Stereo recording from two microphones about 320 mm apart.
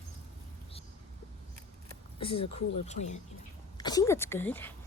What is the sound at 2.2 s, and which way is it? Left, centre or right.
A woman's voice, centre.